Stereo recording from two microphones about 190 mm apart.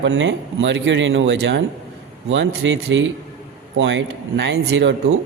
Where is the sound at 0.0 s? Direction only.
75° right (ahead or behind).